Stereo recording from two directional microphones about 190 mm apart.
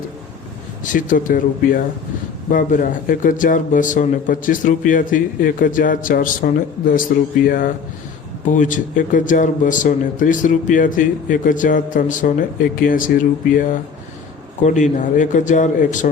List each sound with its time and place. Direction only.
0.9 s a man's voice: 45° left (ahead or behind)